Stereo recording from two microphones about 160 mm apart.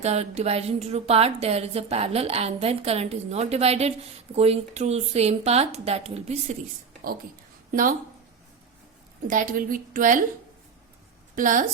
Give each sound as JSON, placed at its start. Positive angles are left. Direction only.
{"t": 0.0, "sound": "speech", "side_deg": -40}
{"t": 7.7, "sound": "a woman's voice", "side_deg": -60}
{"t": 9.2, "sound": "a woman's voice", "side_deg": -55}
{"t": 11.3, "sound": "a woman's voice", "side_deg": -55}